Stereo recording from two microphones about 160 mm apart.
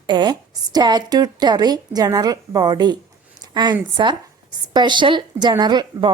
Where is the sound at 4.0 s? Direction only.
30° right (ahead or behind).